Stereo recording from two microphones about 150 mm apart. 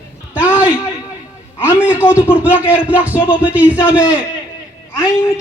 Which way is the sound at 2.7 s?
10° right (ahead or behind).